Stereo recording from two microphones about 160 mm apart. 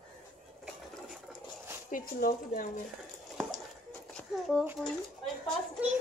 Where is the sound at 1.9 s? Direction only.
65° left (ahead or behind).